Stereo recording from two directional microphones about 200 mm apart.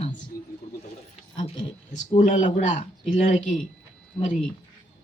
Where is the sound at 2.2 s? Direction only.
35° left (ahead or behind).